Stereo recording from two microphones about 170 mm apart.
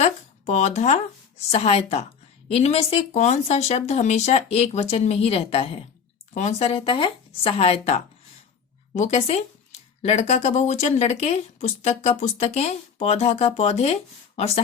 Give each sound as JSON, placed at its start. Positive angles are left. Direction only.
{"t": 0.0, "sound": "speech", "side_deg": 40}